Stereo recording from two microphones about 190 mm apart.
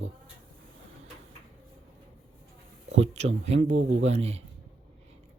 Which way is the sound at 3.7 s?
90° right.